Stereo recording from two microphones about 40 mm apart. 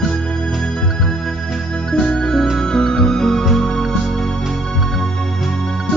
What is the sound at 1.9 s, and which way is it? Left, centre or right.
Music, centre.